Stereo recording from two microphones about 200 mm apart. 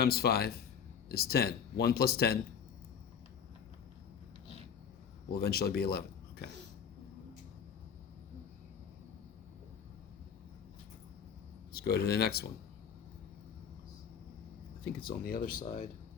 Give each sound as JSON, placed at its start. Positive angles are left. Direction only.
{"t": 0.0, "sound": "speech", "side_deg": 50}
{"t": 5.3, "sound": "speech", "side_deg": 50}
{"t": 11.7, "sound": "speech", "side_deg": 50}
{"t": 15.0, "sound": "speech", "side_deg": 50}